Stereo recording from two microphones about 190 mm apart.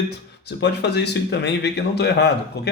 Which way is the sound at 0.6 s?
60° left (ahead or behind).